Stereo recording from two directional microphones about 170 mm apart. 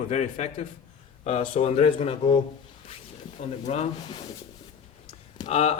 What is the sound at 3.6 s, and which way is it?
Speech, 40° left (ahead or behind).